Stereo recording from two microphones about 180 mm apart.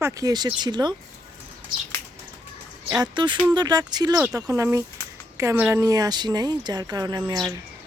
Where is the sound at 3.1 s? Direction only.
25° right (ahead or behind).